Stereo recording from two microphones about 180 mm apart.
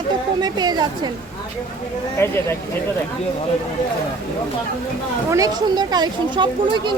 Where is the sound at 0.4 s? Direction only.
20° right (ahead or behind).